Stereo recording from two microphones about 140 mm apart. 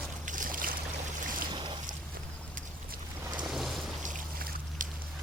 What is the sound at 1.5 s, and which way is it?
Boat, 35° right (ahead or behind).